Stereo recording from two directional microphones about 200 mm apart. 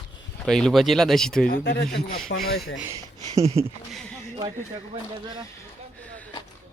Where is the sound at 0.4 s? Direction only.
5° left (ahead or behind).